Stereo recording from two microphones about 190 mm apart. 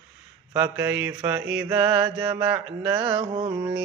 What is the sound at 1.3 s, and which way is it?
Speech, 5° right (ahead or behind).